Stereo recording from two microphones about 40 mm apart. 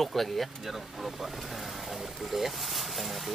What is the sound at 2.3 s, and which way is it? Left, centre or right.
Speech, centre.